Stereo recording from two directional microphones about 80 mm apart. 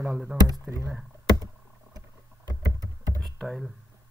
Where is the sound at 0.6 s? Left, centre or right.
Right.